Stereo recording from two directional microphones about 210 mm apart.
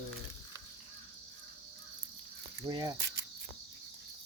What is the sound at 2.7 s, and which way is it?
Speech, 20° right (ahead or behind).